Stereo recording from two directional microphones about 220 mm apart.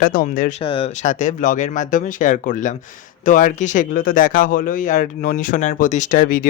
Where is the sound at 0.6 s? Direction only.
25° left (ahead or behind).